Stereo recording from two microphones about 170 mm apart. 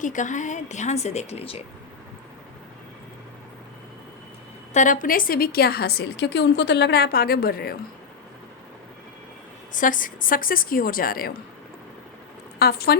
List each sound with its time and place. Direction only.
0.0 s speech: 45° left (ahead or behind)
4.7 s a woman's voice: 50° left (ahead or behind); by 7.8 s 65° left (ahead or behind)
9.7 s a woman's voice: 50° left (ahead or behind)
12.5 s speech: 65° left (ahead or behind)